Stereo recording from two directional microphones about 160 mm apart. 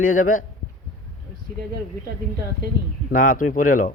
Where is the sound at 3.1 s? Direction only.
60° left (ahead or behind).